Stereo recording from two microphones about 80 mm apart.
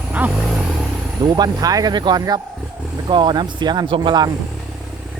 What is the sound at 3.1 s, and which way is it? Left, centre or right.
Speech, right.